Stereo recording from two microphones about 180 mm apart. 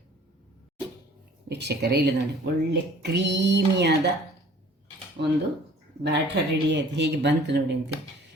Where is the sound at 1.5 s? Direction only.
70° right (ahead or behind).